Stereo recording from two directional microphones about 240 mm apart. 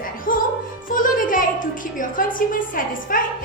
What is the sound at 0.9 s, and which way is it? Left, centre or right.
A woman's voice, left.